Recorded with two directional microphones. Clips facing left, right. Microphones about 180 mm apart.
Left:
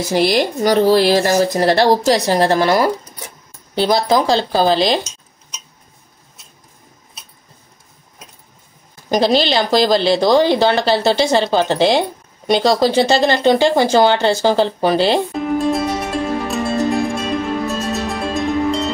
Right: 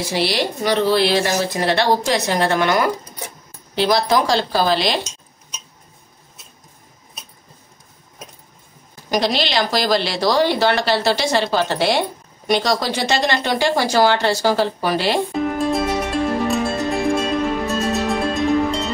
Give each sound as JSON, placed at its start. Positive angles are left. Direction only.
{"t": 0.0, "sound": "speech", "side_deg": 45}
{"t": 4.1, "sound": "speech", "side_deg": 30}
{"t": 9.1, "sound": "speech", "side_deg": 30}
{"t": 15.3, "sound": "music", "side_deg": 0}